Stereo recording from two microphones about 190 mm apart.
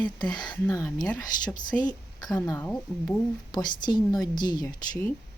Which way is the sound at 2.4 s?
10° left (ahead or behind).